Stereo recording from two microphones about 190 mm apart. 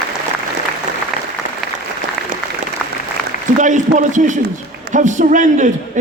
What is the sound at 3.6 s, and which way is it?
A man's voice, 40° right (ahead or behind).